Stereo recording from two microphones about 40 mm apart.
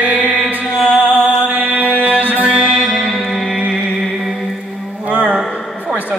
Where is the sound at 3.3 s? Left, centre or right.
Centre.